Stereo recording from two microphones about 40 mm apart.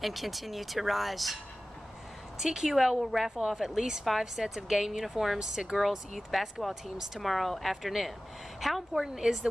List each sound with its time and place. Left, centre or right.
0.0 s speech: centre
2.3 s speech: centre
5.4 s speech: centre
5.8 s speech: centre
7.2 s speech: centre